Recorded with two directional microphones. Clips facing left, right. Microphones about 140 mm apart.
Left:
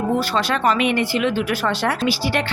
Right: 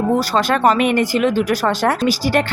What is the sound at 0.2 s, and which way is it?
Speech, 45° right (ahead or behind).